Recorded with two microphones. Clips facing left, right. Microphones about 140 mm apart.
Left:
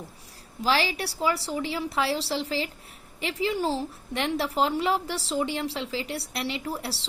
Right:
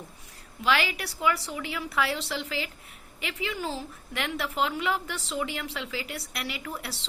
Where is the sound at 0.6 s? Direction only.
30° left (ahead or behind).